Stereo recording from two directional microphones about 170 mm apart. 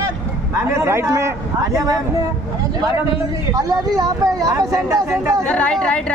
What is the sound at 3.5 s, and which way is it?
Speech, 20° right (ahead or behind).